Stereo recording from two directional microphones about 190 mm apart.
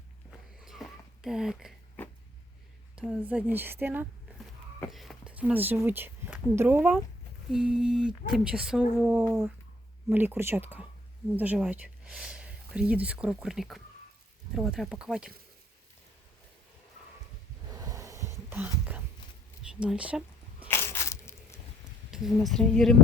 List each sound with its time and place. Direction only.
0.3 s a sound: centre (ahead or behind)
2.9 s a woman's voice: 5° right (ahead or behind)
17.7 s a sound: 20° right (ahead or behind)
19.8 s speech: 5° right (ahead or behind)
20.7 s crushing: 15° left (ahead or behind)
22.1 s speech: centre (ahead or behind)